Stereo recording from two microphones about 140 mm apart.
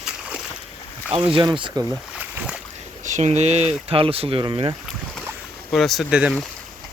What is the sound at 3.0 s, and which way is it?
Speech, 60° right (ahead or behind).